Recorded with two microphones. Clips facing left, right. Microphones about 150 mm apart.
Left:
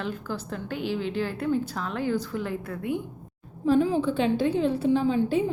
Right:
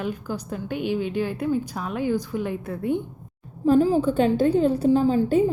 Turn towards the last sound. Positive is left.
turn(degrees=-40)  # may be behind; listen again after turning